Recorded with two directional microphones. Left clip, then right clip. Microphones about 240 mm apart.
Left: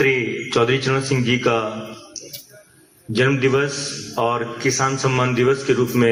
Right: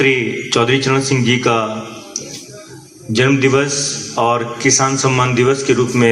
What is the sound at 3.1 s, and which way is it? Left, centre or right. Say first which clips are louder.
A man's voice: right 4 dB; right.